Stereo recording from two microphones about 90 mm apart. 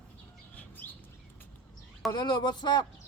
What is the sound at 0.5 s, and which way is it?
Bird, 20° left (ahead or behind).